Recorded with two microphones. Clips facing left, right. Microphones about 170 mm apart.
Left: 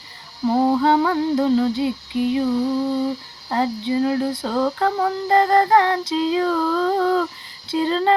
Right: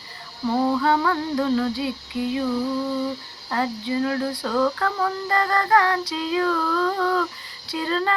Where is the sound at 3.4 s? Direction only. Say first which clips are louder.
Left 4 dB; 25° left (ahead or behind).